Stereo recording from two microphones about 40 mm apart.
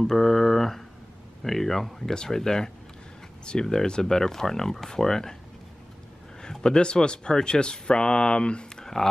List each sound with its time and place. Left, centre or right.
0.0 s speech: centre
6.4 s speech: centre